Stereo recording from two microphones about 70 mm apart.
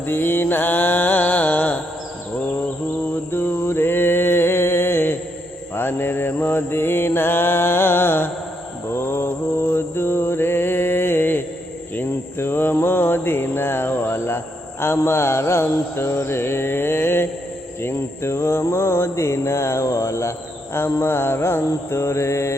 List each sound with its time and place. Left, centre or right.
0.0 s mantra: left
3.1 s mantra: left
11.9 s a sound: left
20.7 s mantra: left